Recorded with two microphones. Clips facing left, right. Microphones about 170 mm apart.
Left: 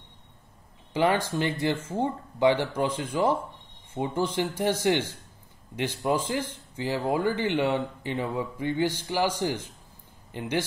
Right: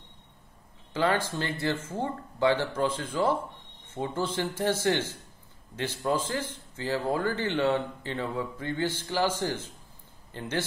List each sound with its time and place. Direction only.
0.9 s speech: 15° left (ahead or behind)